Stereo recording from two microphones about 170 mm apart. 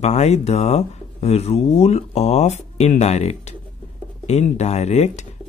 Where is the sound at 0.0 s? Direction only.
40° left (ahead or behind).